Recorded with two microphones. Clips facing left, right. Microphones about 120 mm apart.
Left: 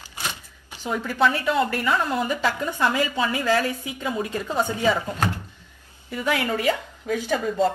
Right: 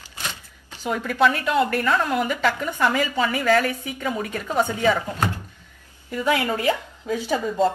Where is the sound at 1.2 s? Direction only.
20° right (ahead or behind).